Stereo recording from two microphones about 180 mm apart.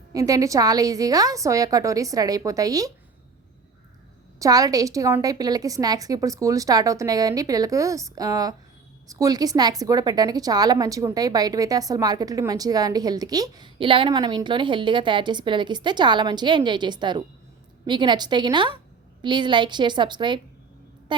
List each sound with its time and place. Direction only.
0.1 s a woman's voice: 20° right (ahead or behind)
4.4 s a woman's voice: 20° right (ahead or behind)